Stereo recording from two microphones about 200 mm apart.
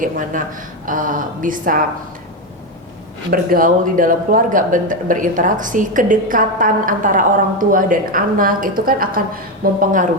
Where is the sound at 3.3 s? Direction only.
45° right (ahead or behind).